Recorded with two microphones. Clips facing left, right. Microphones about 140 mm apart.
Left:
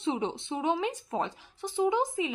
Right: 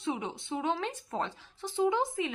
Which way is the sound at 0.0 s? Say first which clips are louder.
Left 4 dB; 25° left (ahead or behind).